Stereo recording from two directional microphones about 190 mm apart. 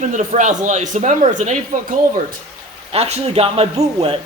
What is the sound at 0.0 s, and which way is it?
Speech, 40° right (ahead or behind).